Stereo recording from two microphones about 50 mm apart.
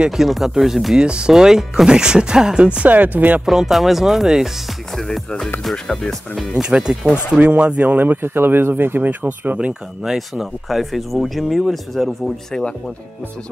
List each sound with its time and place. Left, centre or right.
0.1 s speech: centre
0.9 s speech: centre; by 3.4 s right
3.4 s speech: centre
4.9 s speech: centre
6.5 s speech: centre
7.3 s speech: right
8.2 s speech: right
10.0 s speech: centre